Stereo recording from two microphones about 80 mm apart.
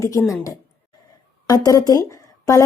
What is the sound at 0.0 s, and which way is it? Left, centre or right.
Speech, left.